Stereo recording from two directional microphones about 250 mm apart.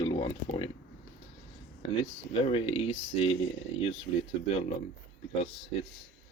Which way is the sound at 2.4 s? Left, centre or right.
Left.